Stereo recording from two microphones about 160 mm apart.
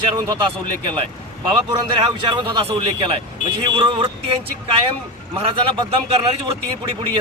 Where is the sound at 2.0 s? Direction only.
30° right (ahead or behind).